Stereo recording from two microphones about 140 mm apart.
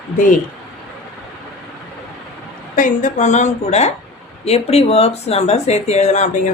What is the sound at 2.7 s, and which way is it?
A woman's voice, 65° left (ahead or behind).